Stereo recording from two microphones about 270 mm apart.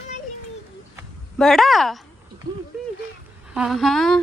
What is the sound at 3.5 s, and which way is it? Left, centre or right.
Speech, centre.